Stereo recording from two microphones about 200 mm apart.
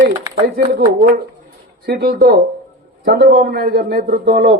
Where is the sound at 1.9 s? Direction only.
50° right (ahead or behind).